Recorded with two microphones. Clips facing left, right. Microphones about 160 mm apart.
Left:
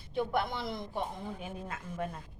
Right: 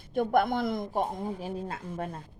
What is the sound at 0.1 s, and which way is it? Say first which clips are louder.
A woman's voice: right 7 dB; 50° right (ahead or behind).